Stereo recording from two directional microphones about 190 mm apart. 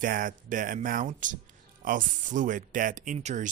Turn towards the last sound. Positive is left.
turn(degrees=-40)  # may be behind; listen again after turning